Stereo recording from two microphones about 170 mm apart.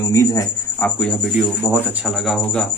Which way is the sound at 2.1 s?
Centre (ahead or behind).